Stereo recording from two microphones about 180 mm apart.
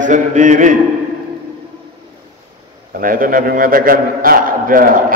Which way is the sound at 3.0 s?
50° right (ahead or behind).